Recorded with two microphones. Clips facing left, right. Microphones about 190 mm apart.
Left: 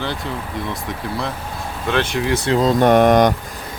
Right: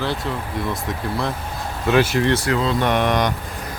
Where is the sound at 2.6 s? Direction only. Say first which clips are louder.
Left 6 dB; 45° left (ahead or behind).